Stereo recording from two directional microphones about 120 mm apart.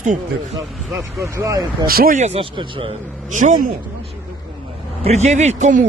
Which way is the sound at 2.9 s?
90° right.